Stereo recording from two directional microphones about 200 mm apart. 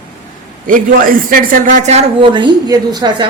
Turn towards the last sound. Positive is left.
turn(degrees=-20)  # may be behind; listen again after turning